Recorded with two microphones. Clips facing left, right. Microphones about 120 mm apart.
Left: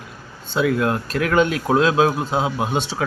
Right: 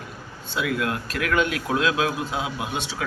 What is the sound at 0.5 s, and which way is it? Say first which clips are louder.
Speech: left 6 dB; 35° left (ahead or behind).